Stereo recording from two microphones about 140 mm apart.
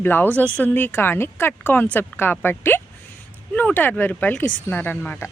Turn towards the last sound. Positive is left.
turn(degrees=15)  # may be behind; listen again after turning